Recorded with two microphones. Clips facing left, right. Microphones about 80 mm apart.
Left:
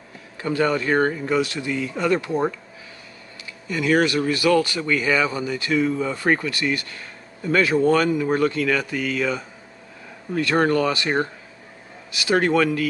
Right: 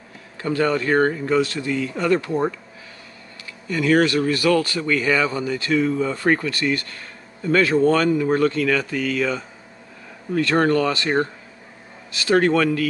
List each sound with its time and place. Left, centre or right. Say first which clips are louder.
0.4 s speech: right 1 dB; centre
3.6 s speech: right 2 dB; centre